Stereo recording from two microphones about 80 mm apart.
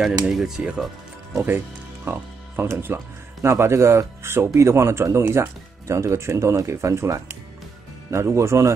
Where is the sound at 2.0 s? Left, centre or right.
Right.